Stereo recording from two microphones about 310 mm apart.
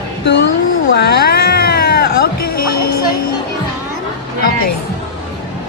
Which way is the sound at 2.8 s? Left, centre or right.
Left.